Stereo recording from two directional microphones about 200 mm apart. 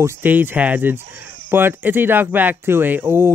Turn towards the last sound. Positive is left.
turn(degrees=-10)  # may be behind; listen again after turning